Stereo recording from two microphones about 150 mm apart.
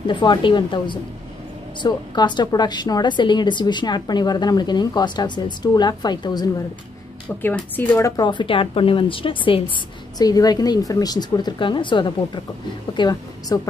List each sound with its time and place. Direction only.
0.0 s a woman's voice: 30° left (ahead or behind)
7.4 s a woman's voice: 10° left (ahead or behind)
8.2 s a woman's voice: 30° left (ahead or behind)